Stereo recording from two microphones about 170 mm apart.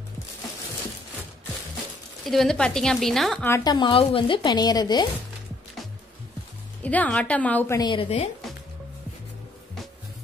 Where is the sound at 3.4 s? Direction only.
15° left (ahead or behind).